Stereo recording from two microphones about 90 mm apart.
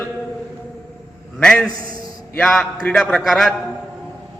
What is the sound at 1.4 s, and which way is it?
A man's voice, 10° left (ahead or behind).